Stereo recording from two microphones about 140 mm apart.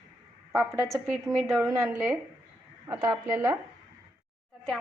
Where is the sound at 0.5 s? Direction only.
15° right (ahead or behind).